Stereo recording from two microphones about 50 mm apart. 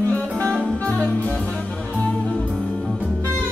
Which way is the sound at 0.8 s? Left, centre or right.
Left.